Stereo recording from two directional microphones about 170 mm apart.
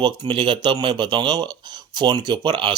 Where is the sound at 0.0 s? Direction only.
25° right (ahead or behind).